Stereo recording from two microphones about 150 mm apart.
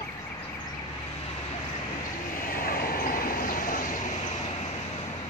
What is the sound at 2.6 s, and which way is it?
Train, 75° left (ahead or behind).